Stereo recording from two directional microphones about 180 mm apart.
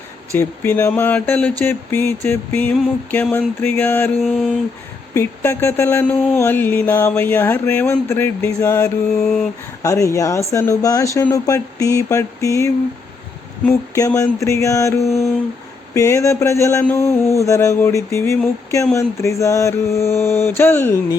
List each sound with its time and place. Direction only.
0.3 s speech: 15° left (ahead or behind)
4.2 s a sound: centre (ahead or behind)
5.1 s speech: 15° left (ahead or behind)
13.9 s speech: 20° left (ahead or behind)
15.0 s a sound: centre (ahead or behind)
16.0 s speech: 15° left (ahead or behind)